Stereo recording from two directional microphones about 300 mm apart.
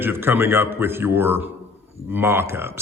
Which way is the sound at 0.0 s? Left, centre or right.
Centre.